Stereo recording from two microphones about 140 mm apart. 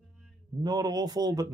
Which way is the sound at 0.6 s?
30° right (ahead or behind).